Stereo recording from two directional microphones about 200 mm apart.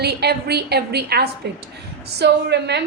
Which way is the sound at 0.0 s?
55° right (ahead or behind).